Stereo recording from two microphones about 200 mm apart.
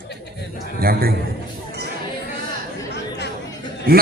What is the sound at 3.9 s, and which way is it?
Speech, 50° right (ahead or behind).